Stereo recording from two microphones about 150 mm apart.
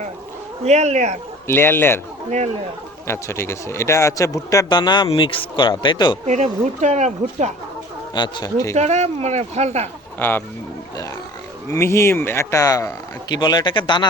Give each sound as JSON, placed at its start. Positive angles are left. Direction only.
{"t": 0.6, "sound": "speech", "side_deg": -50}
{"t": 1.5, "sound": "speech", "side_deg": 15}
{"t": 3.1, "sound": "speech", "side_deg": 15}
{"t": 6.2, "sound": "speech", "side_deg": -50}
{"t": 8.1, "sound": "speech", "side_deg": 30}
{"t": 8.7, "sound": "speech", "side_deg": -50}
{"t": 10.2, "sound": "speech", "side_deg": 15}
{"t": 11.7, "sound": "speech", "side_deg": 20}